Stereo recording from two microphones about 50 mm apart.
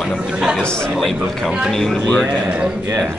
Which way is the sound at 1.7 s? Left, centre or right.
Centre.